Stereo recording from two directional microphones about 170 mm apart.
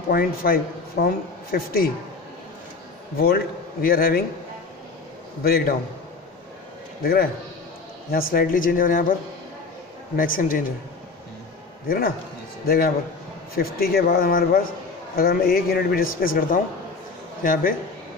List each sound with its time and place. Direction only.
0.1 s a man's voice: 60° left (ahead or behind)
3.2 s a man's voice: 60° left (ahead or behind)
5.4 s a man's voice: 60° left (ahead or behind)
7.0 s a man's voice: 60° left (ahead or behind)
10.1 s speech: 55° left (ahead or behind)
12.6 s a man's voice: 60° left (ahead or behind)